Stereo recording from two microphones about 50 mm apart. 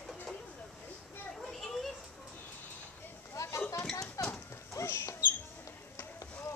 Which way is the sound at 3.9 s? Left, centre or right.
Centre.